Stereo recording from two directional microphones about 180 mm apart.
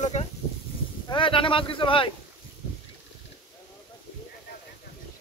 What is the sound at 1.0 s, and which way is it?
Speech, 30° left (ahead or behind).